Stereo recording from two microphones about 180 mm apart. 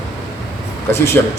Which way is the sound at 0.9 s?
15° left (ahead or behind).